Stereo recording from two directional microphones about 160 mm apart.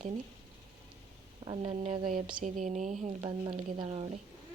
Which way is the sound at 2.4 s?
50° right (ahead or behind).